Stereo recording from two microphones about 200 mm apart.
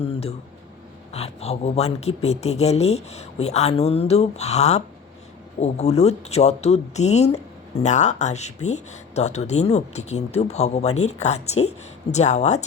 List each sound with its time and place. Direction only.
0.0 s speech: 30° left (ahead or behind)